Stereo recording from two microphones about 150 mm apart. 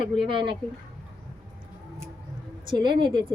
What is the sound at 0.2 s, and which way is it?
Speech, 35° right (ahead or behind).